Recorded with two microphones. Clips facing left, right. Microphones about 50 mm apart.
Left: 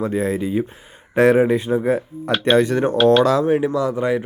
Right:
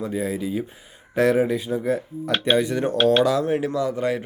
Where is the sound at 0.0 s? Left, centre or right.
Left.